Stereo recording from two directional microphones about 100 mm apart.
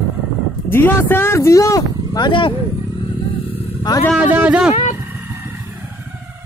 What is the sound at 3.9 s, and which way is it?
Speech, 40° left (ahead or behind).